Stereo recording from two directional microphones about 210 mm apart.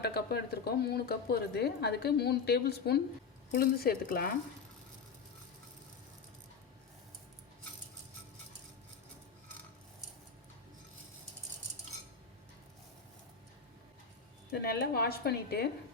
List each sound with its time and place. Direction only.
0.0 s speech: 50° left (ahead or behind)
14.5 s speech: 50° left (ahead or behind)